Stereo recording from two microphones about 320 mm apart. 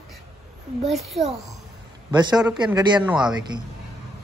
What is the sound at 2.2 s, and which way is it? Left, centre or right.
Speech, centre.